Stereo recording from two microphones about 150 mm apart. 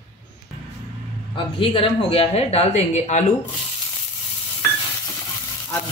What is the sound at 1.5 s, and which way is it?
Speech, 35° left (ahead or behind).